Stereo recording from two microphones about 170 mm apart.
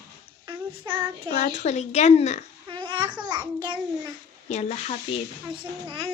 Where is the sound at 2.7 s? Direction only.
25° right (ahead or behind).